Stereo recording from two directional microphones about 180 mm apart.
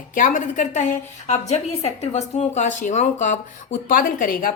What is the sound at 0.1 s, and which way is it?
A woman's voice, 45° left (ahead or behind).